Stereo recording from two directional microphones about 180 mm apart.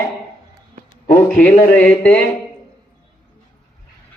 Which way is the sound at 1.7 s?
10° left (ahead or behind).